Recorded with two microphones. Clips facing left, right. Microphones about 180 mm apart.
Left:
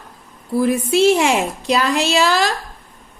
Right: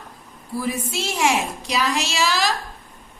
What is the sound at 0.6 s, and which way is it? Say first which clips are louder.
Speech: left 13 dB; 60° left (ahead or behind).